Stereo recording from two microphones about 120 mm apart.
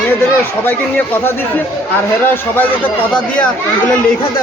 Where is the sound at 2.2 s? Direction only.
15° left (ahead or behind).